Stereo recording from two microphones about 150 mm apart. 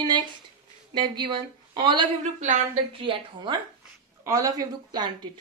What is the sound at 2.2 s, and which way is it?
Speech, 50° right (ahead or behind).